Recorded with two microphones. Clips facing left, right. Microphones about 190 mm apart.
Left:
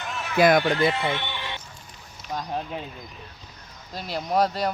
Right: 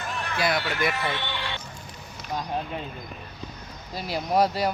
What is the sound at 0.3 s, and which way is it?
Speech, 50° left (ahead or behind).